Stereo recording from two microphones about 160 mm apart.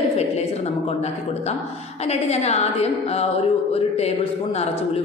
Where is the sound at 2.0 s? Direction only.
40° left (ahead or behind).